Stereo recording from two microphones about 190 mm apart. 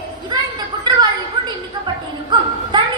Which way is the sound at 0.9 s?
20° right (ahead or behind).